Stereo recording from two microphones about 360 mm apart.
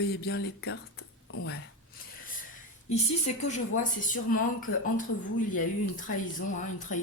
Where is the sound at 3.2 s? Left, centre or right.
Centre.